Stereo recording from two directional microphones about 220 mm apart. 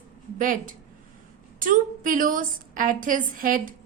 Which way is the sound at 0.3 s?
35° right (ahead or behind).